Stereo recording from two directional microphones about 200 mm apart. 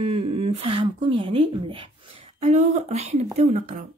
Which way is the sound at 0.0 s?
30° right (ahead or behind).